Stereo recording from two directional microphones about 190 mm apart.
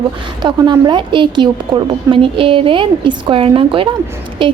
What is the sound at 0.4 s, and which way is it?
A woman's voice, 25° right (ahead or behind).